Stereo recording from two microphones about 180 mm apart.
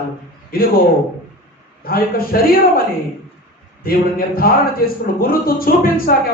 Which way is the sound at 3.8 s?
55° left (ahead or behind).